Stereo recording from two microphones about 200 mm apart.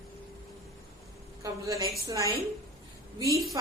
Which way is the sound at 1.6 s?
15° right (ahead or behind).